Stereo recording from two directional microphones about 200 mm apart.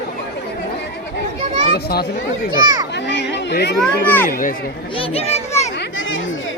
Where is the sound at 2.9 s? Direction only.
60° left (ahead or behind).